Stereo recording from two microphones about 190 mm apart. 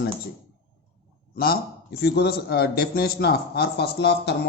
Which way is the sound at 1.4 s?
55° left (ahead or behind).